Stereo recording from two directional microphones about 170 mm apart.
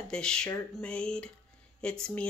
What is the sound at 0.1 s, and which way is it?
A woman's voice, 5° left (ahead or behind).